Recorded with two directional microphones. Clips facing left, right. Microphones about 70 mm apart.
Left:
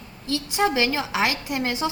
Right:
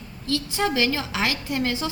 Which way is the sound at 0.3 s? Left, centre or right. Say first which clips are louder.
Left 2 dB; left.